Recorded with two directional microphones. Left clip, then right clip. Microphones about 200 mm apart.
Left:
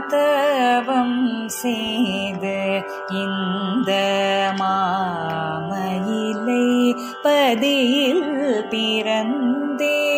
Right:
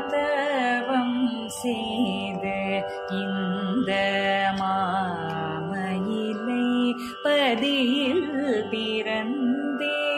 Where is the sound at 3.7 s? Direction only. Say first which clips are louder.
Left 5 dB; 20° left (ahead or behind).